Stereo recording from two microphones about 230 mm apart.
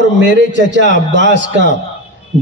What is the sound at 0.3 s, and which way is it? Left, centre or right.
A man's voice, right.